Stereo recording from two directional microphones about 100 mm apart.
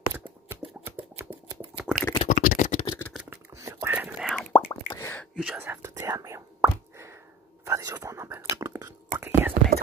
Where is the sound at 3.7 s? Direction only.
35° right (ahead or behind).